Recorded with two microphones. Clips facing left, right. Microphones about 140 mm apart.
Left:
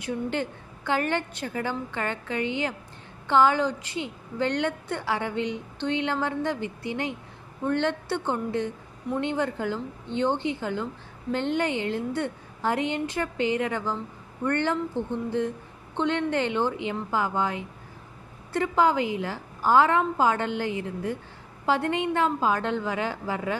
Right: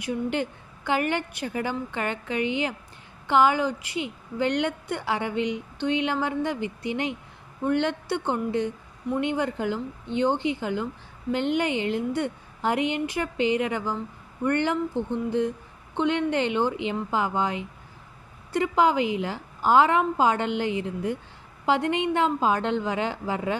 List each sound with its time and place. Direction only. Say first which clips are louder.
0.0 s a woman's voice: right 2 dB; 15° right (ahead or behind)